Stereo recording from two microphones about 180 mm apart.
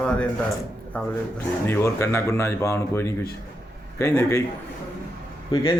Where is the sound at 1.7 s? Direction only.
15° left (ahead or behind).